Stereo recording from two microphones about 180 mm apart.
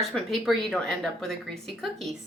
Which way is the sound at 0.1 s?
Centre (ahead or behind).